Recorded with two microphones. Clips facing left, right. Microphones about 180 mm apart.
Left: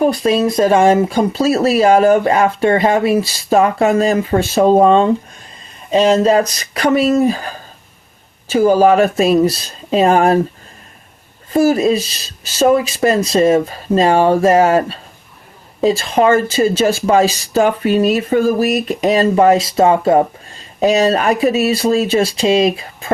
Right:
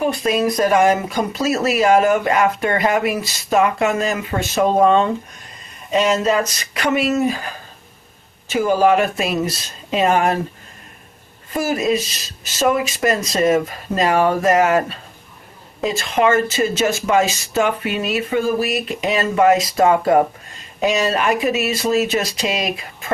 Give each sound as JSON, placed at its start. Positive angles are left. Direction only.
{"t": 0.0, "sound": "speech", "side_deg": 35}
{"t": 11.5, "sound": "speech", "side_deg": 35}